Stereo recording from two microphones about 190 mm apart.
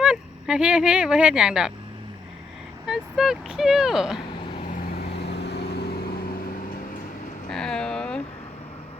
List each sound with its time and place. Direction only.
0.0 s speech: 5° right (ahead or behind)
2.8 s speech: centre (ahead or behind)
4.9 s vehicle: 60° left (ahead or behind)
7.5 s a sound: 5° left (ahead or behind)